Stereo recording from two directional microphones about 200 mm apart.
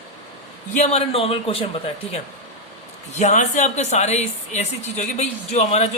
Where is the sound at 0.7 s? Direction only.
35° left (ahead or behind).